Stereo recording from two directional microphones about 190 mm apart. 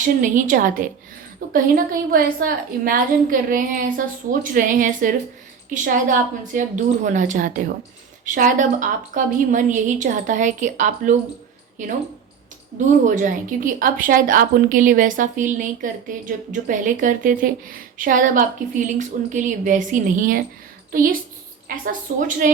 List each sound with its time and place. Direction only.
0.0 s a woman's voice: 45° right (ahead or behind)
13.1 s a woman's voice: 45° right (ahead or behind)